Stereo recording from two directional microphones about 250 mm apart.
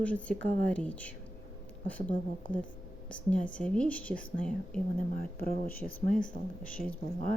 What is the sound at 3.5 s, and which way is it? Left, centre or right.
Speech, centre.